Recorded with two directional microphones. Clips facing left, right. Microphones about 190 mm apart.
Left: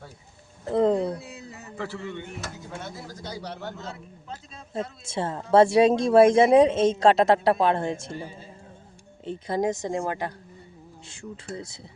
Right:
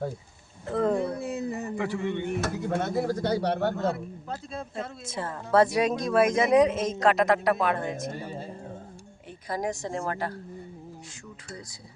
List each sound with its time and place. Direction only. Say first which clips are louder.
0.8 s speech: left 3 dB; 20° left (ahead or behind)
1.2 s speech: right 11 dB; 50° right (ahead or behind)
1.7 s a man's voice: right 1 dB; 15° right (ahead or behind)
2.2 s speech: right 9 dB; 60° right (ahead or behind)
4.7 s speech: left 3 dB; 25° left (ahead or behind)
9.2 s speech: left 5 dB; 25° left (ahead or behind)